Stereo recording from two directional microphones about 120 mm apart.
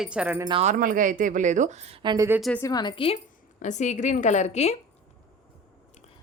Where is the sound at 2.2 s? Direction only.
20° right (ahead or behind).